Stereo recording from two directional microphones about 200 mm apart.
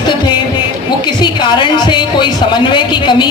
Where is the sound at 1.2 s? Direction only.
20° left (ahead or behind).